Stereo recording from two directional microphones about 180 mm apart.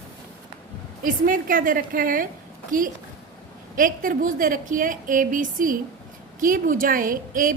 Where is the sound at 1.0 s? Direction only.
50° right (ahead or behind).